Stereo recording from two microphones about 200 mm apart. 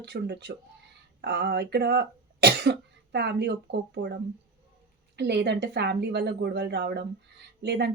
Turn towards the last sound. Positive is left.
turn(degrees=-55)  # may be behind; listen again after turning